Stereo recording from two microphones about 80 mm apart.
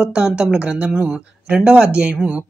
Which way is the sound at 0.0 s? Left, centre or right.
Centre.